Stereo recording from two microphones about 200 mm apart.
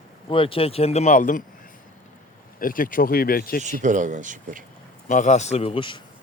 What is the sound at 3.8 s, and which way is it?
Speech, 40° right (ahead or behind).